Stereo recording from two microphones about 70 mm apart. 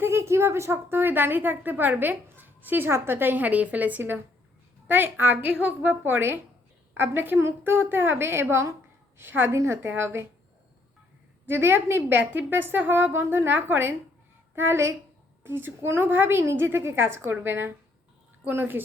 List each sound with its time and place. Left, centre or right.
0.0 s a woman's voice: right
11.4 s a woman's voice: right